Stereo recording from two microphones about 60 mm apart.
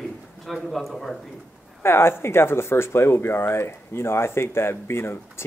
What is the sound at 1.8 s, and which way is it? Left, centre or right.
Speech, left.